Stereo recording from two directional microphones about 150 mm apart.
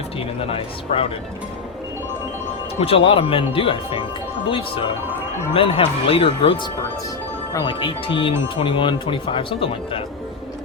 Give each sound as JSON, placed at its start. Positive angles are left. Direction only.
{"t": 0.2, "sound": "speech", "side_deg": 40}
{"t": 2.8, "sound": "speech", "side_deg": 40}